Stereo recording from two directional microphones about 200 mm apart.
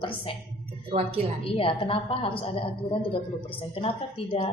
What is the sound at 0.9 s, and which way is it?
Speech, 30° right (ahead or behind).